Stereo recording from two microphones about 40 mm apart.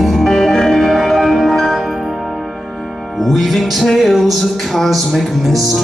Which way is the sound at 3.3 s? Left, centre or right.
Centre.